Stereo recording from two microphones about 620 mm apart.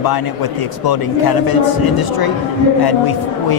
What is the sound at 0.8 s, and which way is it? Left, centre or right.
A man's voice, left.